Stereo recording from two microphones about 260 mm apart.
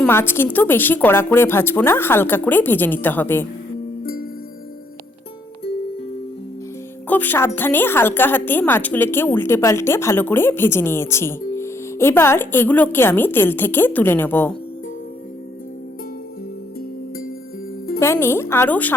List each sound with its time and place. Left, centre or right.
0.0 s a woman's voice: centre
4.0 s music: left
7.1 s a woman's voice: centre
18.0 s a woman's voice: centre